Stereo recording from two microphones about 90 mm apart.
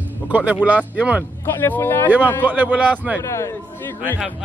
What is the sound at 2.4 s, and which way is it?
Speech, 20° right (ahead or behind).